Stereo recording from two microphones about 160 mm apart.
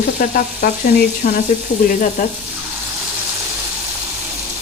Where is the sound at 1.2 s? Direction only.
50° left (ahead or behind).